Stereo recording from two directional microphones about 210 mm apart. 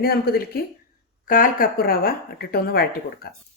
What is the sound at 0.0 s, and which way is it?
Speech, 45° left (ahead or behind).